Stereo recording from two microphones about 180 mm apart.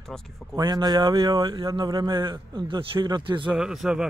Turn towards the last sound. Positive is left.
turn(degrees=-5)  # may be behind; listen again after turning